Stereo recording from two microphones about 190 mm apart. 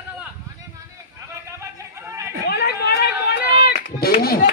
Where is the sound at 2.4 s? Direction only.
60° left (ahead or behind).